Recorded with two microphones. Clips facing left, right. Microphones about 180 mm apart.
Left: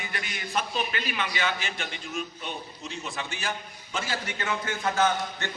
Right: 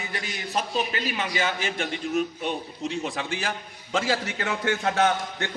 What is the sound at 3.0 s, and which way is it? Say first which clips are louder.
A man's voice: right 5 dB; 90° right.